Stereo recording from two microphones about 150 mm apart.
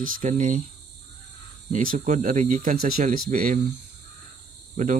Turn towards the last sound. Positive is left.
turn(degrees=-60)  # may be behind; listen again after turning